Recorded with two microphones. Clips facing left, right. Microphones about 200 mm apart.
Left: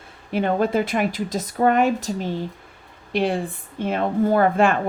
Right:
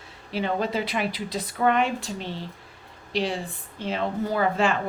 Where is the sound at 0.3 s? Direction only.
50° left (ahead or behind).